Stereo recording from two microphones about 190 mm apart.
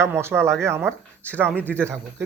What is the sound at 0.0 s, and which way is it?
Speech, 15° right (ahead or behind).